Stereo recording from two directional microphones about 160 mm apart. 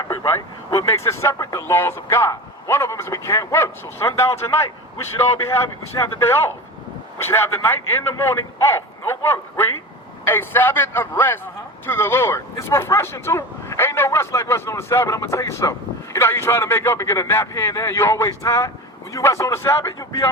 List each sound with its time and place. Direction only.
0.0 s vehicle: 25° left (ahead or behind)
0.7 s speech: 20° left (ahead or behind)